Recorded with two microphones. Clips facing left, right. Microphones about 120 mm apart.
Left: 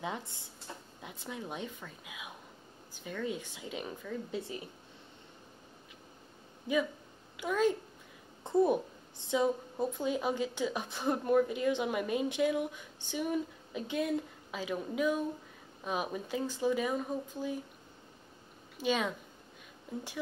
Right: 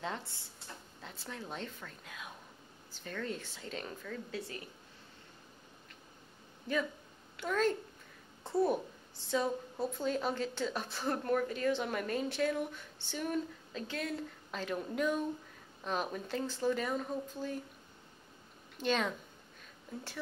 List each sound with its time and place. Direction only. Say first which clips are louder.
0.0 s a woman's voice: left 1 dB; 15° left (ahead or behind)
6.7 s a woman's voice: left 3 dB; 15° left (ahead or behind)
18.8 s a woman's voice: left 1 dB; 10° left (ahead or behind)